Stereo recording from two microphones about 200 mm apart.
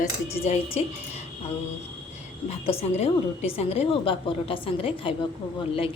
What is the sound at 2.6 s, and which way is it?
A woman's voice, 30° left (ahead or behind).